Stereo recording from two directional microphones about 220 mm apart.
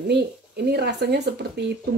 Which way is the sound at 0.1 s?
50° right (ahead or behind).